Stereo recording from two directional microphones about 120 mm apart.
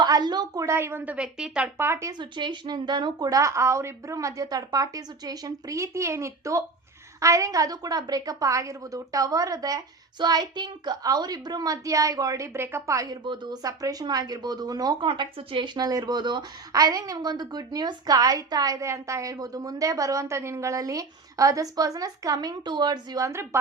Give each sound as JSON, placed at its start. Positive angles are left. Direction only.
{"t": 0.0, "sound": "a woman's voice", "side_deg": -35}
{"t": 1.9, "sound": "a woman's voice", "side_deg": -25}
{"t": 2.1, "sound": "a woman's voice", "side_deg": -40}
{"t": 13.2, "sound": "speech", "side_deg": -40}